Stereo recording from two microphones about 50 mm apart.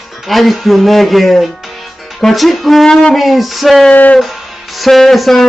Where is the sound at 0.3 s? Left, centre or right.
Centre.